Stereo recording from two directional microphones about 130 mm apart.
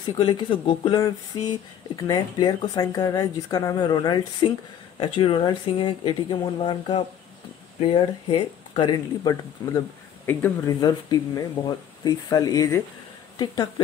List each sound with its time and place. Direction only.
0.0 s a woman's voice: 35° left (ahead or behind)
4.9 s speech: 45° left (ahead or behind); by 9.8 s 30° left (ahead or behind)
10.2 s speech: 15° left (ahead or behind)
10.8 s a woman's voice: 30° left (ahead or behind)